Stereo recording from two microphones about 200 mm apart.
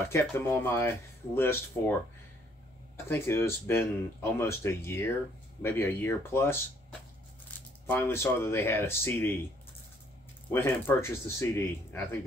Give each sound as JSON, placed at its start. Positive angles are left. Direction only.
{"t": 0.1, "sound": "speech", "side_deg": 10}
{"t": 3.1, "sound": "speech", "side_deg": 10}
{"t": 7.8, "sound": "speech", "side_deg": 10}
{"t": 10.5, "sound": "speech", "side_deg": 10}